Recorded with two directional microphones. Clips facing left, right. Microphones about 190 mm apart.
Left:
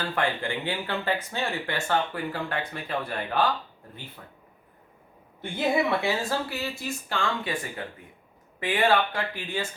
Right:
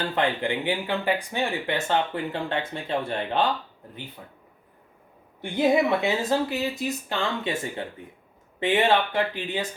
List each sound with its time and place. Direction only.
0.1 s speech: 20° right (ahead or behind)
5.4 s speech: 20° right (ahead or behind)